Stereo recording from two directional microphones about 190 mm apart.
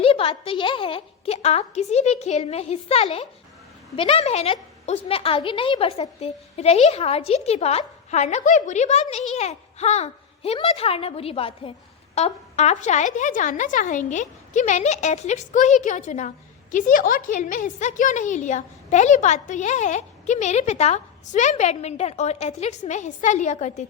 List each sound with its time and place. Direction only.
0.0 s a woman's voice: 30° left (ahead or behind)